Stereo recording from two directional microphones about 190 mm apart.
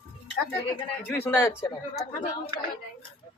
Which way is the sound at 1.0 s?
10° left (ahead or behind).